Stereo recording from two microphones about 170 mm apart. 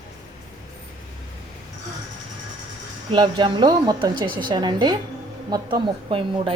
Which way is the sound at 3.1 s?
25° right (ahead or behind).